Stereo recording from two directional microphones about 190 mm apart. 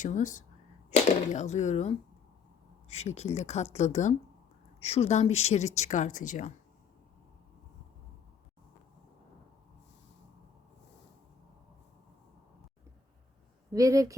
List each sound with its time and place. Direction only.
0.0 s speech: 40° left (ahead or behind)
13.7 s speech: 15° right (ahead or behind)